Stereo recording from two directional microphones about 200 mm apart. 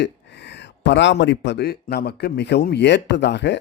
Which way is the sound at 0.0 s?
60° left (ahead or behind).